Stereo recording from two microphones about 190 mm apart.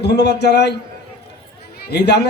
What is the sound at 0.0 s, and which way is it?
Speech, 60° left (ahead or behind).